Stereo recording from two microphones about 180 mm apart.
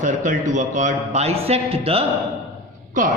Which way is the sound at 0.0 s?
45° right (ahead or behind).